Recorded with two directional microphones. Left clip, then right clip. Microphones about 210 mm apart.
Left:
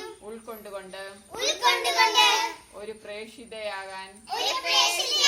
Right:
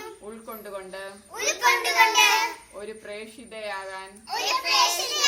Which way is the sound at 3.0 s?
45° right (ahead or behind).